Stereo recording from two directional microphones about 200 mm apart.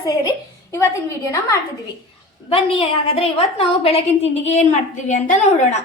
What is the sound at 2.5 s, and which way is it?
A woman's voice, 25° left (ahead or behind).